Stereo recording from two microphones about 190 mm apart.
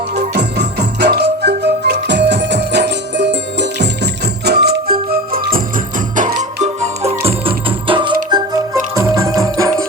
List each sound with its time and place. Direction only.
0.3 s music: 60° right (ahead or behind); by 9.8 s 15° right (ahead or behind)